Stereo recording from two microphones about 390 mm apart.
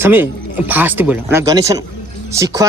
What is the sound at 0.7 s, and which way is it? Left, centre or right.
A child's voice, centre.